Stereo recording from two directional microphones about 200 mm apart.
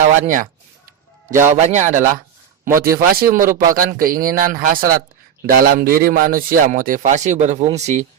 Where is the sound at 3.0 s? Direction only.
50° right (ahead or behind).